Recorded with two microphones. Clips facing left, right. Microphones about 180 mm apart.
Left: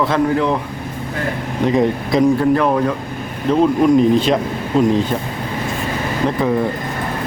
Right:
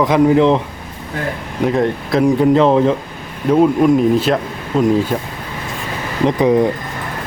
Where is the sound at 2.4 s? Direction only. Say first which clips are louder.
Right 4 dB; 20° right (ahead or behind).